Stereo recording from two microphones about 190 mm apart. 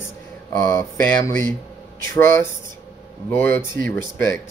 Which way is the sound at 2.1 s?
15° left (ahead or behind).